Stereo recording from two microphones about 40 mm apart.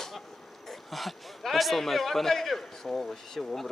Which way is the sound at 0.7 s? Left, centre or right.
Centre.